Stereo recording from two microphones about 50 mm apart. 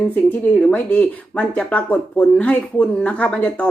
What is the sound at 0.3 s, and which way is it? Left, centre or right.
Speech, left.